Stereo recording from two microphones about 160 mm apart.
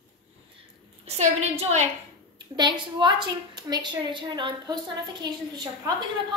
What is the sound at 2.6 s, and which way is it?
A woman's voice, 30° right (ahead or behind).